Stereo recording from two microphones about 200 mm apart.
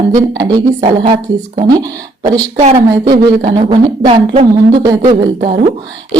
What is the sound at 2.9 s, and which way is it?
Speech, 25° right (ahead or behind).